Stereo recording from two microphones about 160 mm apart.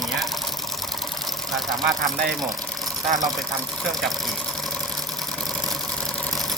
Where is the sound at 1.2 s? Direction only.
Centre (ahead or behind).